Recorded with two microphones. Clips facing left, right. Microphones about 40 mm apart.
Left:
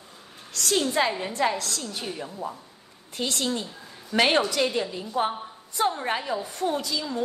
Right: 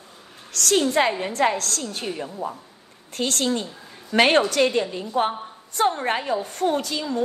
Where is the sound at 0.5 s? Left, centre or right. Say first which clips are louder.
Right 4 dB; right.